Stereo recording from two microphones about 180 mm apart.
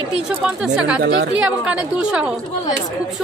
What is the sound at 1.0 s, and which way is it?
Speech, 60° right (ahead or behind).